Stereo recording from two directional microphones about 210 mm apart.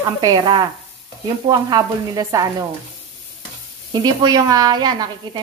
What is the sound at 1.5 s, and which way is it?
Sizzle, 20° right (ahead or behind).